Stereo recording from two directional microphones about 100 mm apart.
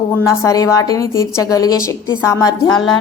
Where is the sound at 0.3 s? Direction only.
30° left (ahead or behind).